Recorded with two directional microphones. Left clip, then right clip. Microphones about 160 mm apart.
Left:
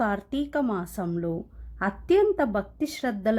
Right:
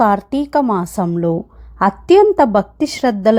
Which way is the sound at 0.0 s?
20° right (ahead or behind).